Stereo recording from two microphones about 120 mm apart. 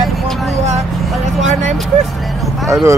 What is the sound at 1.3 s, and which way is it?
Speech, 75° right (ahead or behind).